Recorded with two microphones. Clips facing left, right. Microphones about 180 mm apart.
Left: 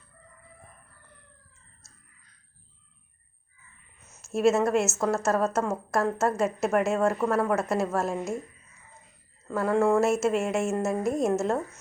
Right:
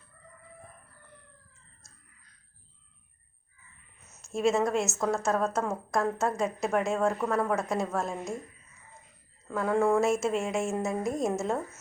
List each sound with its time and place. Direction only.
4.1 s a woman's voice: 5° left (ahead or behind)
9.5 s a woman's voice: centre (ahead or behind)